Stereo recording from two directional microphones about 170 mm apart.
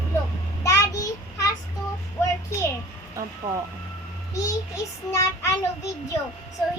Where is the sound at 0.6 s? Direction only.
20° left (ahead or behind).